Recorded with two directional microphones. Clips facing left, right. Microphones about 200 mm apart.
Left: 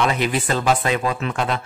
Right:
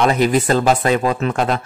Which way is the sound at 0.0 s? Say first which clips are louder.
Right 6 dB; 40° right (ahead or behind).